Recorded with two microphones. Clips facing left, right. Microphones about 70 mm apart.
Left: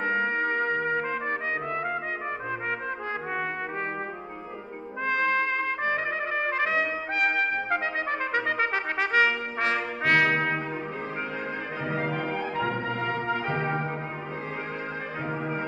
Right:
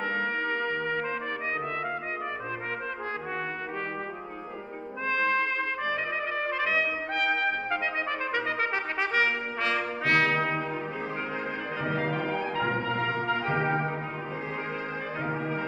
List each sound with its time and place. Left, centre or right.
0.0 s trumpet: left
5.0 s brass instrument: left
6.6 s trumpet: left
9.1 s brass instrument: left
12.1 s music: centre
13.5 s brass instrument: centre